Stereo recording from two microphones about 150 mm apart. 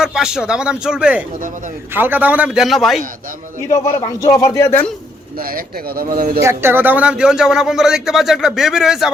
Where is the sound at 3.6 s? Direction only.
20° left (ahead or behind).